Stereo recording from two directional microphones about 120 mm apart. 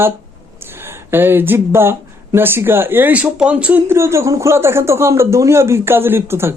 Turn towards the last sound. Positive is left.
turn(degrees=-20)  # may be behind; listen again after turning